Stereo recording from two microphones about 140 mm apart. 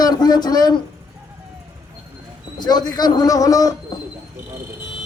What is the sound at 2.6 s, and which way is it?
A man's voice, 30° left (ahead or behind).